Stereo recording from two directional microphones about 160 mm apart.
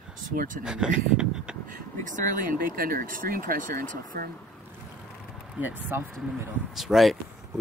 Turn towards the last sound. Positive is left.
turn(degrees=0)  # may be behind; listen again after turning